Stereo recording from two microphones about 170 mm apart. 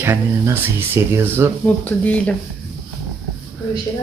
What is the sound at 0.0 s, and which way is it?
Speech, 15° right (ahead or behind).